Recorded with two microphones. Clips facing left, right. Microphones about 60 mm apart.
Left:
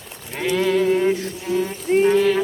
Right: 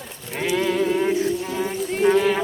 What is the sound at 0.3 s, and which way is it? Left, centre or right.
Sheep, centre.